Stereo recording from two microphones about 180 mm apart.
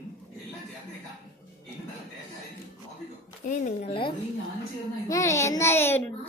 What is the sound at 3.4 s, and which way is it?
Speech, 45° left (ahead or behind).